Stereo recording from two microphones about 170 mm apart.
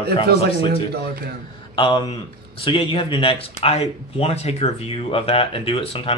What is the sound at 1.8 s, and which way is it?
Speech, 30° left (ahead or behind).